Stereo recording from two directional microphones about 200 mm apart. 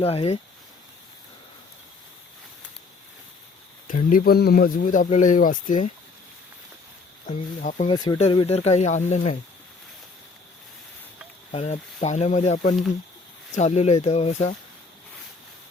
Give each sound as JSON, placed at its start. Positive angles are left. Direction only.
{"t": 0.0, "sound": "speech", "side_deg": 30}
{"t": 3.8, "sound": "speech", "side_deg": 45}
{"t": 7.3, "sound": "speech", "side_deg": 40}
{"t": 7.9, "sound": "speech", "side_deg": 20}
{"t": 11.5, "sound": "speech", "side_deg": 35}